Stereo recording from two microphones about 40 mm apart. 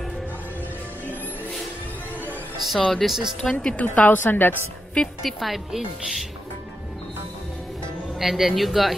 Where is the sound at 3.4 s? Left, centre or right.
Centre.